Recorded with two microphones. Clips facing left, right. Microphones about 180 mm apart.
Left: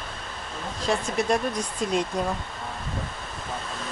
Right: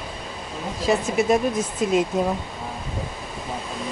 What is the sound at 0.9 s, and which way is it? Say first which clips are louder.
Speech: right 5 dB; 5° right (ahead or behind).